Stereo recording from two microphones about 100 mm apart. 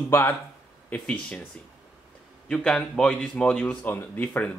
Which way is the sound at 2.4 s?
10° left (ahead or behind).